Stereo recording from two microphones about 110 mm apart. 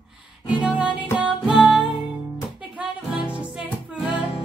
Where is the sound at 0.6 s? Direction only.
10° right (ahead or behind).